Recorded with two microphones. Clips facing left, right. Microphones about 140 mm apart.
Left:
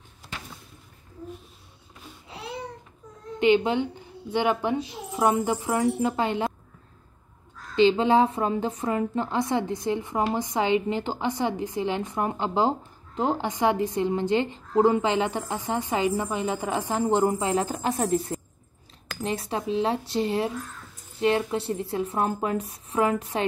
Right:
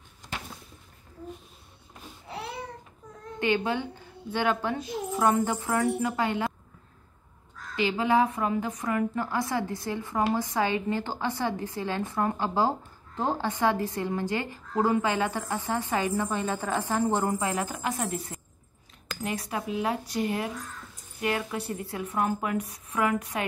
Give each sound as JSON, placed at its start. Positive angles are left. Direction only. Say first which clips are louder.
{"t": 3.3, "sound": "a woman's voice", "louder": "left 6 dB", "side_deg": 20}
{"t": 7.7, "sound": "a woman's voice", "louder": "left 5 dB", "side_deg": 25}